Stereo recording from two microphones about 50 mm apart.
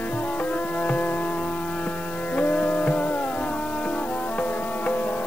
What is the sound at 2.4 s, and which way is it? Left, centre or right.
Music, left.